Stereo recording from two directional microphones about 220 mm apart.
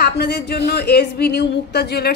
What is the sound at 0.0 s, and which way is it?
A woman's voice, 50° left (ahead or behind).